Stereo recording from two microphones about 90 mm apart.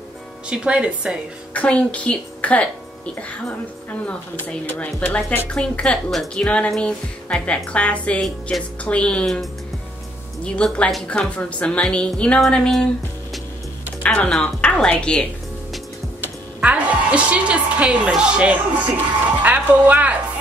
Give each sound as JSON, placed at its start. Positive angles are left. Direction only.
{"t": 0.5, "sound": "speech", "side_deg": -10}
{"t": 1.5, "sound": "speech", "side_deg": 15}
{"t": 4.0, "sound": "speech", "side_deg": 15}
{"t": 14.0, "sound": "a woman's voice", "side_deg": 15}
{"t": 16.2, "sound": "a woman's voice", "side_deg": -15}